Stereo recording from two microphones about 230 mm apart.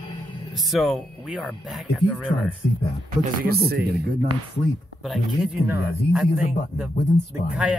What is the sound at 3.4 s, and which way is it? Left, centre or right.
Speech, right.